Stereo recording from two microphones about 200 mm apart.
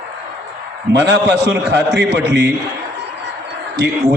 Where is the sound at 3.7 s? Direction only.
55° right (ahead or behind).